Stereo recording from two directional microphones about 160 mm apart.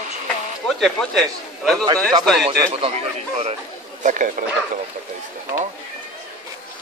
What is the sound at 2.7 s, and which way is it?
Speech, 40° right (ahead or behind).